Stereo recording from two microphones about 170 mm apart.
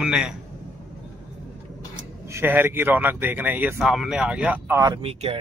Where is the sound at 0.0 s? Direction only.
5° right (ahead or behind).